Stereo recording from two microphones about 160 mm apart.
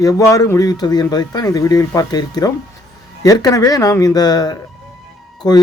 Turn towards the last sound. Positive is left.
turn(degrees=25)  # may be behind; listen again after turning